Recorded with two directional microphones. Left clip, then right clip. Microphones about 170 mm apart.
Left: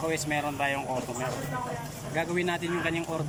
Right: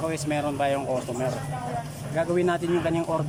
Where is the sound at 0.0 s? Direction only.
20° right (ahead or behind).